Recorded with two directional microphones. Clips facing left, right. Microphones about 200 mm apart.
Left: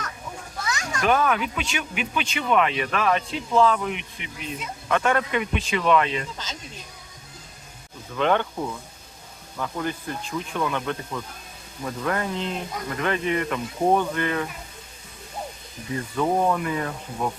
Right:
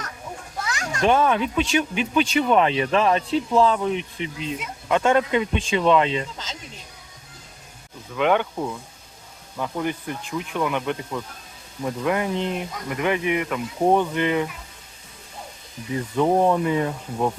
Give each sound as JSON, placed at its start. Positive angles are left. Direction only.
{"t": 0.8, "sound": "speech", "side_deg": -25}
{"t": 8.1, "sound": "speech", "side_deg": -10}
{"t": 16.1, "sound": "speech", "side_deg": -20}